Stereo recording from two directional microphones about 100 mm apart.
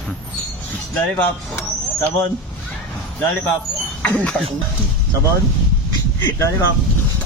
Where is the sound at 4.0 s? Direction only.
15° left (ahead or behind).